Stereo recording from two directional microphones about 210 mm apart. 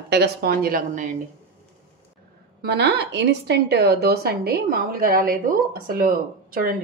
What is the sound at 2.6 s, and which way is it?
A woman's voice, 55° right (ahead or behind).